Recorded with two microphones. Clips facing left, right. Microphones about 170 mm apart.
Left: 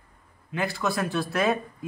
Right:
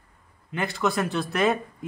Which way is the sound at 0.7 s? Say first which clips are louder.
Right 4 dB; 20° right (ahead or behind).